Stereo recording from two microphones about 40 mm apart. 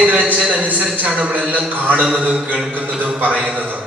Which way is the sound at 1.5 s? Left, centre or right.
Right.